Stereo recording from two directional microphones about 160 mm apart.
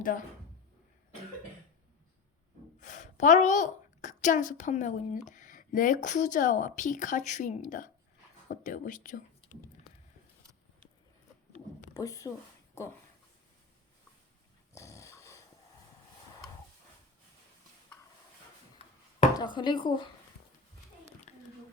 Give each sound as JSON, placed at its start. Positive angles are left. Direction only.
{"t": 2.8, "sound": "a woman's voice", "side_deg": 50}
{"t": 11.9, "sound": "speech", "side_deg": 20}
{"t": 14.8, "sound": "dog", "side_deg": 20}
{"t": 19.4, "sound": "speech", "side_deg": 30}